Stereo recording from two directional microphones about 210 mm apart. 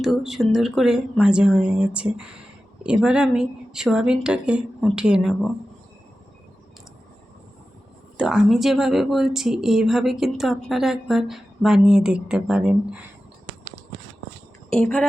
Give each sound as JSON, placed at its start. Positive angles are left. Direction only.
{"t": 0.0, "sound": "speech", "side_deg": 0}
{"t": 8.2, "sound": "speech", "side_deg": -5}
{"t": 14.7, "sound": "speech", "side_deg": 5}